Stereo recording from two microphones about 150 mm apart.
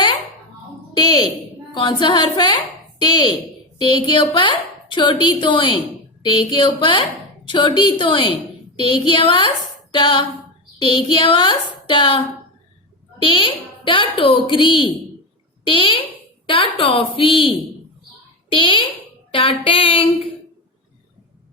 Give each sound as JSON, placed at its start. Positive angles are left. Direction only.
{"t": 0.9, "sound": "a woman's voice", "side_deg": 30}